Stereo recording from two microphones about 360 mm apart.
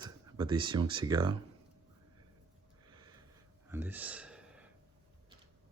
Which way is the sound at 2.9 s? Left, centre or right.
Centre.